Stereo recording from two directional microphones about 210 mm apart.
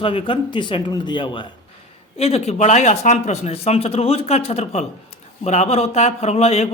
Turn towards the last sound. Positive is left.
turn(degrees=30)  # may be behind; listen again after turning